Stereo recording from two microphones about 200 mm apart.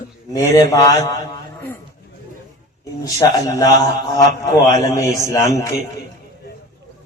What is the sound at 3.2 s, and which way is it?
Speech, 20° left (ahead or behind).